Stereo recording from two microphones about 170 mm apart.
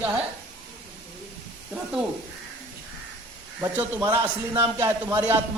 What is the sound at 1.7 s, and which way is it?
Speech, 5° right (ahead or behind).